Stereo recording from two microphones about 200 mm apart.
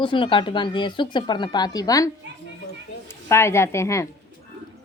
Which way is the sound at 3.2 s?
15° left (ahead or behind).